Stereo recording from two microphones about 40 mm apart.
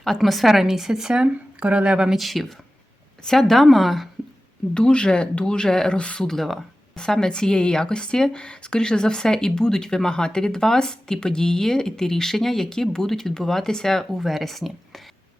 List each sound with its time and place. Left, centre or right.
0.0 s a woman's voice: centre
1.1 s speech: right
2.1 s a woman's voice: centre
4.7 s speech: left
6.0 s speech: left
6.2 s a woman's voice: centre
6.9 s a woman's voice: centre